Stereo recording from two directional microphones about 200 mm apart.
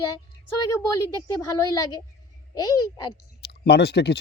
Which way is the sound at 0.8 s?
15° left (ahead or behind).